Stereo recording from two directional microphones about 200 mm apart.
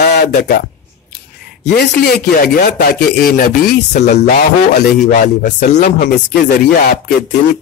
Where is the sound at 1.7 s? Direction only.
50° left (ahead or behind).